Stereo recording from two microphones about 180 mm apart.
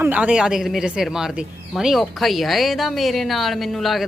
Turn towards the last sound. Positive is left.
turn(degrees=0)  # may be behind; listen again after turning